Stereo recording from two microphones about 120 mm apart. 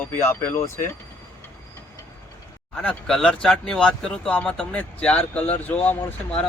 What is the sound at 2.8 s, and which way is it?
Speech, 5° left (ahead or behind).